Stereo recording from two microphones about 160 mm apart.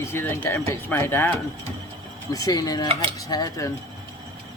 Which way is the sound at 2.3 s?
20° left (ahead or behind).